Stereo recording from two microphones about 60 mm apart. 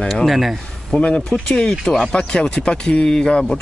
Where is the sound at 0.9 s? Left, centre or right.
Centre.